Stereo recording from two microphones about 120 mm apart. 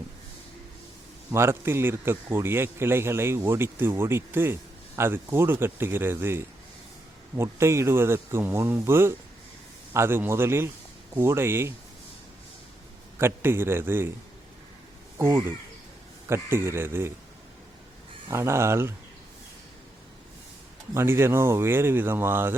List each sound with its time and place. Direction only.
1.3 s a man's voice: 20° right (ahead or behind)
13.1 s a man's voice: 20° right (ahead or behind)
16.2 s a man's voice: 20° right (ahead or behind)
18.3 s a man's voice: 20° right (ahead or behind)
20.9 s a man's voice: 20° right (ahead or behind)